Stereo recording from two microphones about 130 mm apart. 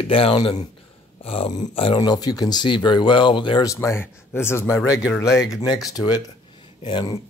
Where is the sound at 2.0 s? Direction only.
30° left (ahead or behind).